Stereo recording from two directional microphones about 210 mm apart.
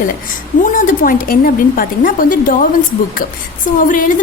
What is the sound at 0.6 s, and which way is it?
A woman's voice, 40° left (ahead or behind).